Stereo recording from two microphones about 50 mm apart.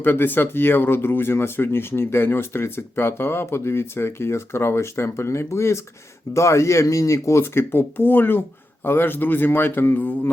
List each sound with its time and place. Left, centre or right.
0.0 s speech: left
6.3 s speech: left
7.4 s speech: left